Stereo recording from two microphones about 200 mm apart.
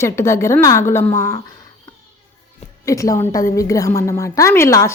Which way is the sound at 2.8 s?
15° left (ahead or behind).